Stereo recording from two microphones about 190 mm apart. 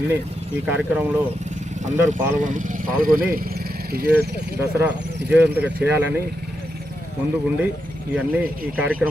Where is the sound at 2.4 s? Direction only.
45° right (ahead or behind).